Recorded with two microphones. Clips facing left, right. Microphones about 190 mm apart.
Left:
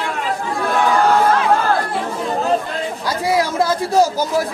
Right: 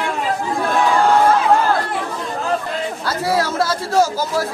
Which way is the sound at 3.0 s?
15° left (ahead or behind).